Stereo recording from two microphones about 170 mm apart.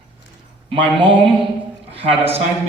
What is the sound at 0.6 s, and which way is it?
A man's voice, 30° right (ahead or behind).